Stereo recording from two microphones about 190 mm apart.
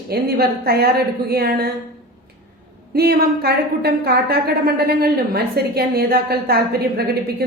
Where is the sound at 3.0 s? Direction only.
55° right (ahead or behind).